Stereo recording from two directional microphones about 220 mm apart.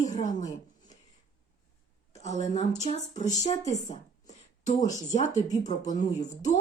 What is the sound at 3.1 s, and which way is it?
Speech, 35° left (ahead or behind).